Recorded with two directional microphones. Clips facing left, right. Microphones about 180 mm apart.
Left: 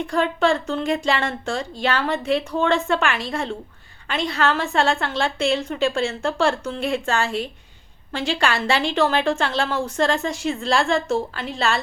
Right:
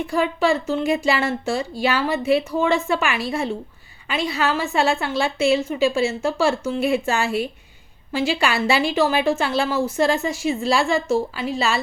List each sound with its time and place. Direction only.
0.1 s a woman's voice: 5° right (ahead or behind)